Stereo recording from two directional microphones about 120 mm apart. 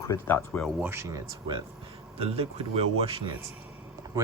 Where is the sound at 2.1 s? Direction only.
55° right (ahead or behind).